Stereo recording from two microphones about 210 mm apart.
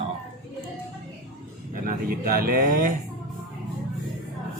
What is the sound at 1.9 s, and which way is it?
A man's voice, 45° right (ahead or behind).